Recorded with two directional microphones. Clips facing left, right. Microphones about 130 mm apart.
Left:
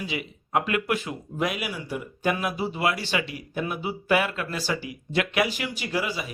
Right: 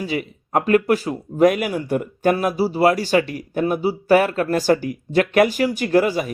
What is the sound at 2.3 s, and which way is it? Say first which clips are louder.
Speech: right 9 dB; 40° right (ahead or behind).